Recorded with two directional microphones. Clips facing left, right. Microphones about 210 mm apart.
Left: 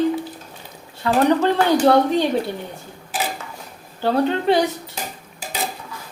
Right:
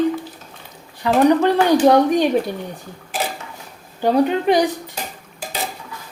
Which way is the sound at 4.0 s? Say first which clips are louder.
Right 3 dB; 15° right (ahead or behind).